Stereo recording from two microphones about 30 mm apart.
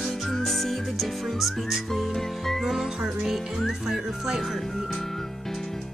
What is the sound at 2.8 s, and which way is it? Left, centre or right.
Music, centre.